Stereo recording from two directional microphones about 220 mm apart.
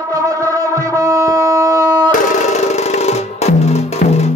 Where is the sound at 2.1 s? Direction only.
30° left (ahead or behind).